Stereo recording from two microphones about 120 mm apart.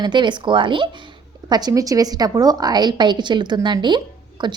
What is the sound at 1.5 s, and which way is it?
A woman's voice, 30° right (ahead or behind).